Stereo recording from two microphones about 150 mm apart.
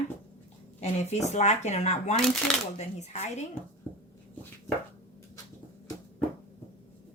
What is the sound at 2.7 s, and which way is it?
Speech, 50° left (ahead or behind).